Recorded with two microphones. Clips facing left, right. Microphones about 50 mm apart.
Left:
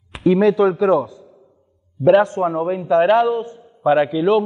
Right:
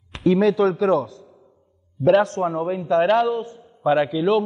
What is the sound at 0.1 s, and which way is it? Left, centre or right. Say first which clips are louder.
A man's voice: left 3 dB; centre.